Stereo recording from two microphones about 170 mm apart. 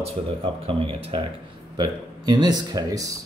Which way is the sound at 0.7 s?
30° right (ahead or behind).